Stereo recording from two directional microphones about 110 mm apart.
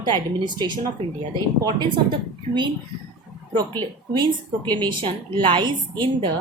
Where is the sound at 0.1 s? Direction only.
45° right (ahead or behind).